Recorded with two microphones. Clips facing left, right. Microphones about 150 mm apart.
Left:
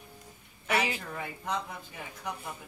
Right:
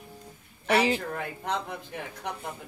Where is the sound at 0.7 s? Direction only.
30° right (ahead or behind).